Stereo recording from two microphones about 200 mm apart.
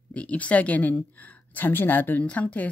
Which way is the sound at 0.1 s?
5° left (ahead or behind).